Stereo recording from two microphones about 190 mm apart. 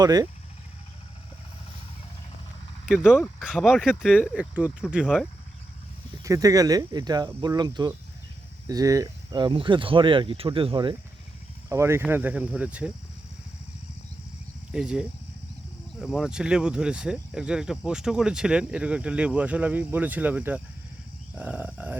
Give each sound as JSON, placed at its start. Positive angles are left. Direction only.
{"t": 0.0, "sound": "speech", "side_deg": -20}
{"t": 2.8, "sound": "speech", "side_deg": -5}
{"t": 6.2, "sound": "speech", "side_deg": -15}
{"t": 11.7, "sound": "speech", "side_deg": -15}
{"t": 14.7, "sound": "speech", "side_deg": -5}